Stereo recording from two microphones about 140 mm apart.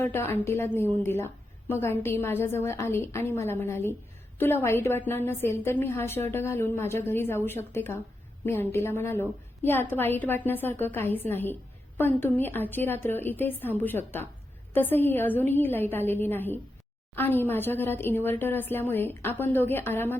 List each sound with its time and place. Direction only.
0.0 s a woman's voice: 15° left (ahead or behind)